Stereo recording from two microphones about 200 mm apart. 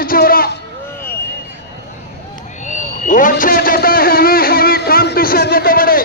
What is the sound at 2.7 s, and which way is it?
A man's voice, 40° left (ahead or behind).